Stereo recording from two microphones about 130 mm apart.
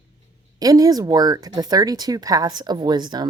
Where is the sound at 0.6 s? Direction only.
30° right (ahead or behind).